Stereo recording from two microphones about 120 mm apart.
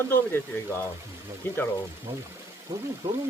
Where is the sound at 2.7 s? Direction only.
30° right (ahead or behind).